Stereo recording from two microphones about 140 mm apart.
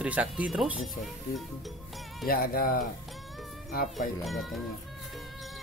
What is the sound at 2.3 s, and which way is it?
Speech, 90° left.